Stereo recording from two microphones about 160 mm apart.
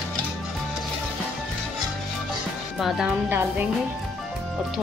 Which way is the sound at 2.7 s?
5° right (ahead or behind).